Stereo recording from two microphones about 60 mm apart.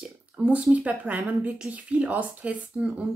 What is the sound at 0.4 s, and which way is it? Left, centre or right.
Speech, centre.